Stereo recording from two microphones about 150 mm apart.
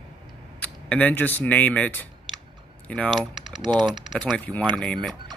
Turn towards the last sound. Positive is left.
turn(degrees=5)  # may be behind; listen again after turning